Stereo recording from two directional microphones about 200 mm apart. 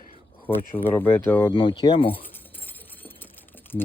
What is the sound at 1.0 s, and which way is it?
Speech, 10° left (ahead or behind).